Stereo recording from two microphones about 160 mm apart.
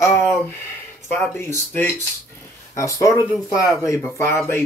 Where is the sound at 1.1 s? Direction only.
15° left (ahead or behind).